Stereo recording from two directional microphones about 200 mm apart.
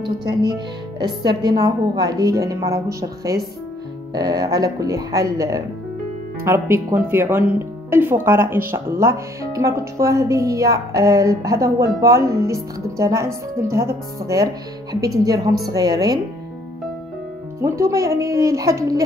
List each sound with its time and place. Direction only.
0.3 s speech: 20° right (ahead or behind)
17.6 s speech: 15° right (ahead or behind)